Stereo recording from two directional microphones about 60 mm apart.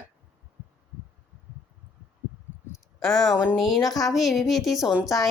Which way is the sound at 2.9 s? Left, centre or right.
Centre.